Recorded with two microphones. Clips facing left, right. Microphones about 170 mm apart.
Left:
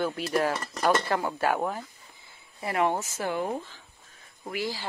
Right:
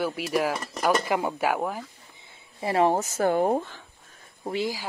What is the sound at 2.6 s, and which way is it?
Speech, 30° right (ahead or behind).